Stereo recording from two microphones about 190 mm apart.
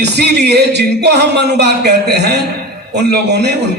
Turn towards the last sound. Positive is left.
turn(degrees=-60)  # may be behind; listen again after turning